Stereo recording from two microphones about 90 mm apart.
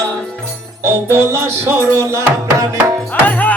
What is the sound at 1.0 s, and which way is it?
Music, 30° right (ahead or behind).